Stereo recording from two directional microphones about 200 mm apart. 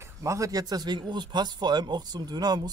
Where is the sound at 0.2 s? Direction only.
15° right (ahead or behind).